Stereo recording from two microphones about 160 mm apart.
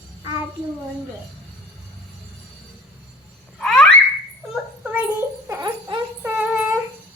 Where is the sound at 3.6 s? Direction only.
5° left (ahead or behind).